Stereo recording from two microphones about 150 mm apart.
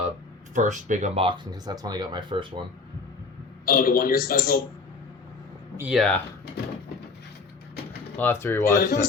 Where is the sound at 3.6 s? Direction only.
80° left.